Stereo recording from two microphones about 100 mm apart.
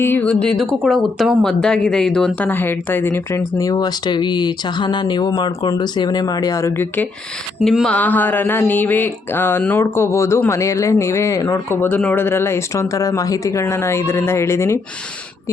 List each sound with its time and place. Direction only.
0.0 s a woman's voice: 15° left (ahead or behind)
2.5 s speech: 20° left (ahead or behind)
3.6 s speech: 40° left (ahead or behind); by 7.1 s 20° left (ahead or behind)
7.6 s speech: centre (ahead or behind)
7.9 s speech: 15° left (ahead or behind)